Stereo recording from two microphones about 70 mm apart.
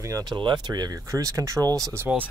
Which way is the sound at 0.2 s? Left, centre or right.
Right.